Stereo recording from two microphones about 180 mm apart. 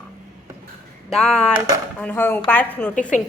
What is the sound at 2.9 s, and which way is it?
Speech, 45° left (ahead or behind).